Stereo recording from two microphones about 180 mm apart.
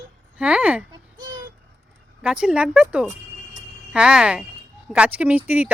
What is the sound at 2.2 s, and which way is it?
Speech, 5° right (ahead or behind).